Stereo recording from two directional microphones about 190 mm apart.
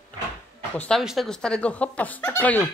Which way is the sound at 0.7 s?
5° left (ahead or behind).